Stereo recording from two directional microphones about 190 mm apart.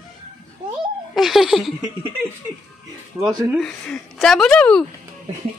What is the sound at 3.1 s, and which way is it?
Speech, 10° right (ahead or behind).